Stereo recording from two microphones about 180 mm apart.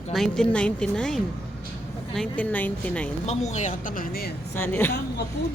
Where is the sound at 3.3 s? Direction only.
40° left (ahead or behind).